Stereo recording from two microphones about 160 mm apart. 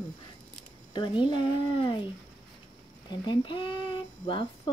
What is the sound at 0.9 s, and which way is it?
Speech, 30° left (ahead or behind).